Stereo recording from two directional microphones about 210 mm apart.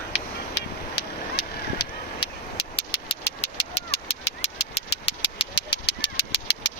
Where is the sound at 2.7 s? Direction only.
30° left (ahead or behind).